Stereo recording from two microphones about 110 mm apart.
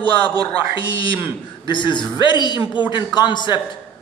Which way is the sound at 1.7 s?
45° left (ahead or behind).